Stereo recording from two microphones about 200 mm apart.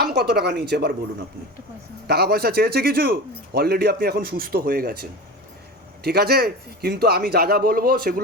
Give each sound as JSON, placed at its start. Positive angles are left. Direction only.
{"t": 0.0, "sound": "speech", "side_deg": -55}
{"t": 2.0, "sound": "speech", "side_deg": -50}